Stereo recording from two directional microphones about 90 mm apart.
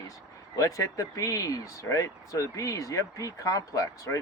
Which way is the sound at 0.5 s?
35° left (ahead or behind).